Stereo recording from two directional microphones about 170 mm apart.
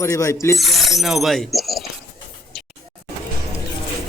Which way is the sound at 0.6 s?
Centre (ahead or behind).